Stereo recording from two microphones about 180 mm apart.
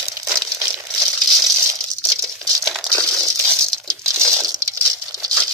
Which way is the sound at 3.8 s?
15° right (ahead or behind).